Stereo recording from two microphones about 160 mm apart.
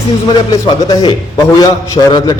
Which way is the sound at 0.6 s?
25° left (ahead or behind).